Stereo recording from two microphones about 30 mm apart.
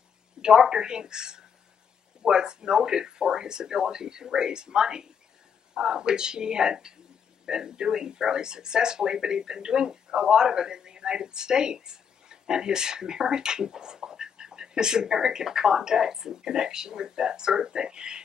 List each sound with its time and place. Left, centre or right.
0.4 s speech: right